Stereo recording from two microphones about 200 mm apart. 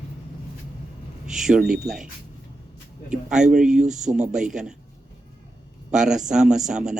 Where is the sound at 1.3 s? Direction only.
5° right (ahead or behind).